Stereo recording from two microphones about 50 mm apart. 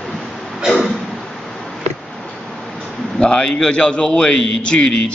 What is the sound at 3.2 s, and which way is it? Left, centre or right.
A man's voice, centre.